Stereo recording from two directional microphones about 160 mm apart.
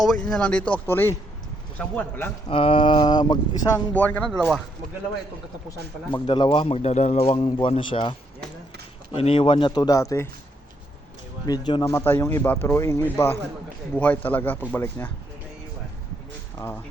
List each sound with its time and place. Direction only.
0.0 s speech: centre (ahead or behind)
2.5 s a man's voice: 35° left (ahead or behind)
3.9 s speech: 10° left (ahead or behind)
6.1 s a man's voice: 30° left (ahead or behind)
9.1 s speech: 35° left (ahead or behind)
11.4 s speech: 25° left (ahead or behind)
11.9 s speech: 15° left (ahead or behind)